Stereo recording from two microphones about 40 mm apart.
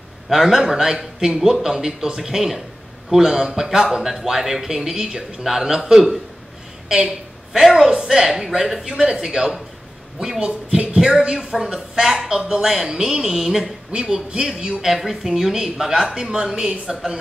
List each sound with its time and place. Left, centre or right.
0.3 s a woman's voice: centre
13.9 s speech: right
14.9 s speech: centre